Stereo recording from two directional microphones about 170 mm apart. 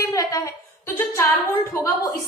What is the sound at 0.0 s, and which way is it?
A woman's voice, 20° left (ahead or behind).